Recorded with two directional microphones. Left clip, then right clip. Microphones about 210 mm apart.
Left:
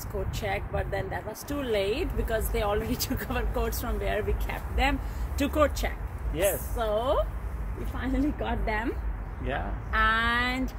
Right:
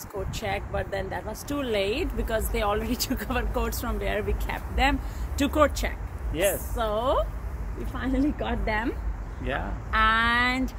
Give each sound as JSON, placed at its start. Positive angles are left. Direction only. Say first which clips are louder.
{"t": 0.3, "sound": "speech", "louder": "right 2 dB", "side_deg": -20}
{"t": 6.3, "sound": "speech", "louder": "right 2 dB", "side_deg": 0}
{"t": 6.8, "sound": "speech", "louder": "right 1 dB", "side_deg": -15}
{"t": 9.4, "sound": "speech", "louder": "right 2 dB", "side_deg": 0}
{"t": 9.8, "sound": "speech", "louder": "right 3 dB", "side_deg": -15}